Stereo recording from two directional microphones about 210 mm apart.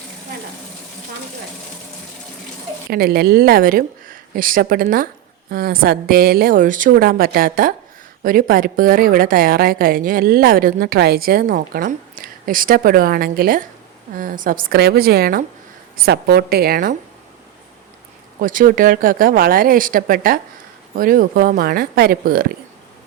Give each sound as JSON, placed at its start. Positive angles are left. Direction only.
{"t": 2.9, "sound": "a woman's voice", "side_deg": -45}
{"t": 18.3, "sound": "a woman's voice", "side_deg": -40}